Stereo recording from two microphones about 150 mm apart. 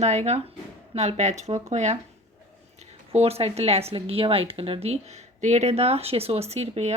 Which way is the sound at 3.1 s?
45° right (ahead or behind).